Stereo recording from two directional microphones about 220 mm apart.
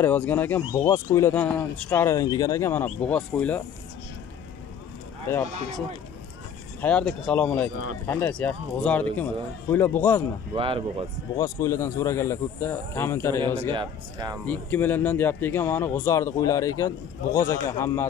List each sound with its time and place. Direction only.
0.0 s speech: 10° left (ahead or behind)
6.8 s speech: 5° left (ahead or behind)
10.5 s speech: 25° right (ahead or behind)
11.3 s speech: 15° left (ahead or behind)
13.7 s speech: 15° right (ahead or behind)
14.4 s speech: 10° left (ahead or behind)